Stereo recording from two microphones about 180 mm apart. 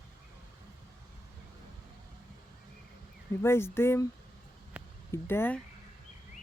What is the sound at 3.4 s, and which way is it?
Speech, 15° left (ahead or behind).